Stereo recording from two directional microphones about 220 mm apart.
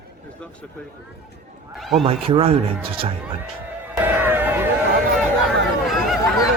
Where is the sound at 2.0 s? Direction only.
25° right (ahead or behind).